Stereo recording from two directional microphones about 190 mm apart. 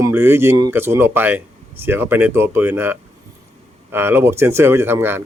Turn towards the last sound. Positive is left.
turn(degrees=-10)  # may be behind; listen again after turning